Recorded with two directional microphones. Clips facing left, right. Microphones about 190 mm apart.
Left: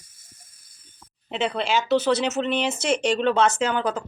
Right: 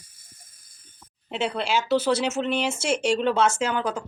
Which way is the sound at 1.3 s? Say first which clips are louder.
Left 1 dB; 10° right (ahead or behind).